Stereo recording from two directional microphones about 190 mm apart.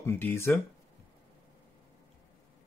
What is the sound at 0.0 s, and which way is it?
Speech, 10° left (ahead or behind).